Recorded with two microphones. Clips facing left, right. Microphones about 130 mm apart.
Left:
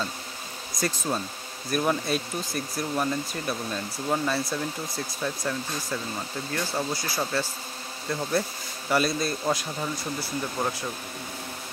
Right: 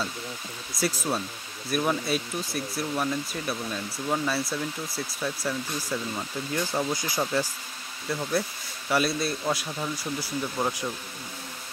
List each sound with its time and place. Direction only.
0.7 s speech: 5° right (ahead or behind)
8.2 s speech: centre (ahead or behind)